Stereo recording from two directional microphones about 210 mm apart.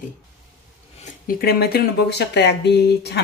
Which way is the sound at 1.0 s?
45° left (ahead or behind).